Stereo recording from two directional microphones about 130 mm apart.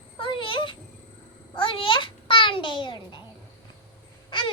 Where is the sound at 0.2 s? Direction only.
40° left (ahead or behind).